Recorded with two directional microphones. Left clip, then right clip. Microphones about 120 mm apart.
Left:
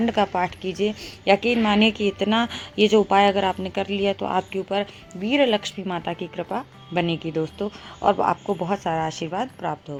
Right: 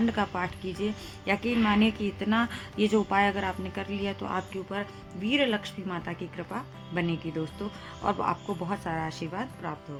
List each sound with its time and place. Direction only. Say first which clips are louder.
0.0 s a woman's voice: left 8 dB; 25° left (ahead or behind)